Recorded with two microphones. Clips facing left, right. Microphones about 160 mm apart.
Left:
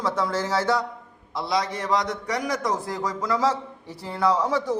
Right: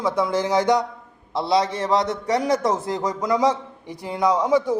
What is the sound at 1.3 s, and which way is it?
A man's voice, 25° right (ahead or behind).